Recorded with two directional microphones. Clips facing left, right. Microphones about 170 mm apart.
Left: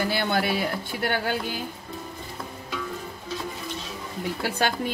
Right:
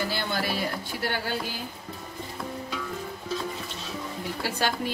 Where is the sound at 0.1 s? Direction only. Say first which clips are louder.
Left 5 dB; 55° left (ahead or behind).